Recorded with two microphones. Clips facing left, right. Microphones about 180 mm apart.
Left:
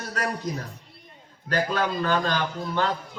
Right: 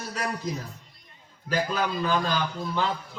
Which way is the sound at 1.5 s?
5° right (ahead or behind).